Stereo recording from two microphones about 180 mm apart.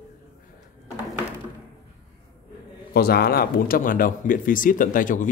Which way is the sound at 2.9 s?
60° left (ahead or behind).